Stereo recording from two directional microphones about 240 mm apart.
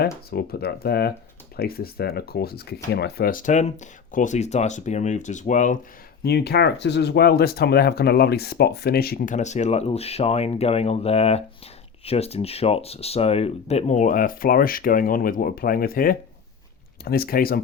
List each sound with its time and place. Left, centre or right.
0.0 s speech: left
6.2 s speech: left